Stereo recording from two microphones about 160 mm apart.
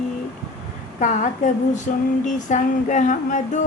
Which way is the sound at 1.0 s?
50° left (ahead or behind).